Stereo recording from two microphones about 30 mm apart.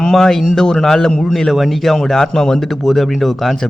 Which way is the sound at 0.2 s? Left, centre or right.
Centre.